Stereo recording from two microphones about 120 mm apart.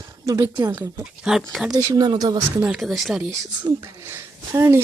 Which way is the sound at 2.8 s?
Centre (ahead or behind).